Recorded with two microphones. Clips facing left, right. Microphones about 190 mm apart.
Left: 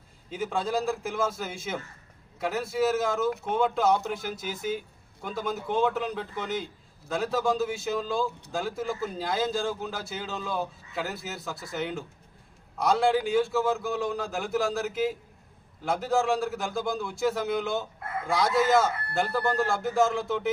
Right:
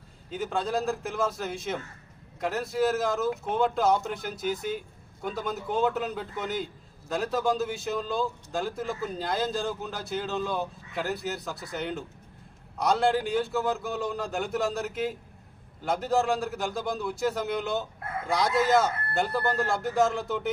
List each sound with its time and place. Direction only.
0.3 s speech: centre (ahead or behind)